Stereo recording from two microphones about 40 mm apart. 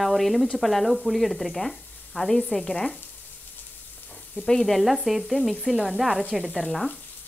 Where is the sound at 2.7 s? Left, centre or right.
Left.